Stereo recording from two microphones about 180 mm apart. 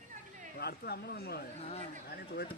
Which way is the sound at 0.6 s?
60° left (ahead or behind).